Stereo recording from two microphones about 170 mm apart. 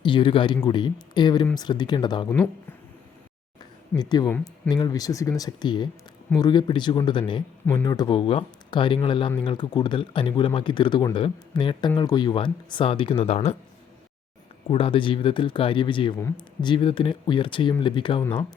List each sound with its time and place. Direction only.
0.0 s speech: 30° left (ahead or behind)
3.9 s speech: 25° left (ahead or behind)
4.3 s speech: 10° left (ahead or behind)
4.7 s speech: 25° left (ahead or behind)
14.7 s speech: 35° left (ahead or behind)